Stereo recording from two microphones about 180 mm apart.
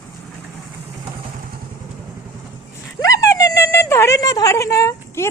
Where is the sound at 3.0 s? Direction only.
20° left (ahead or behind).